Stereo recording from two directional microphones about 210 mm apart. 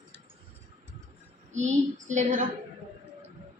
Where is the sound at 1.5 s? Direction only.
35° right (ahead or behind).